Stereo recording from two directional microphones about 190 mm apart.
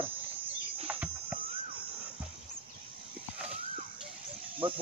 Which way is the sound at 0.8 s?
10° right (ahead or behind).